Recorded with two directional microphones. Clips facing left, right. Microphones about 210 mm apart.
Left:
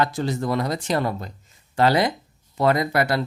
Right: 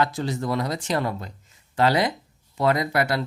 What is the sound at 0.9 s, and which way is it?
Speech, 40° left (ahead or behind).